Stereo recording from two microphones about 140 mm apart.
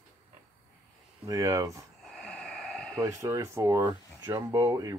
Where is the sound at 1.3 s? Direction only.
25° right (ahead or behind).